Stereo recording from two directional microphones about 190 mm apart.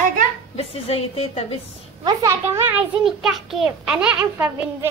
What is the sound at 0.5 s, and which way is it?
Speech, 30° left (ahead or behind).